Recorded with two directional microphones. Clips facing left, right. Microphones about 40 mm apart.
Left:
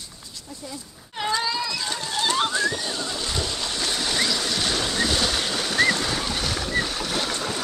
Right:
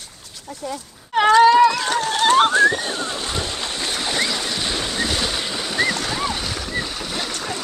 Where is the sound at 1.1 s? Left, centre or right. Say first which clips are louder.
Right 14 dB; right.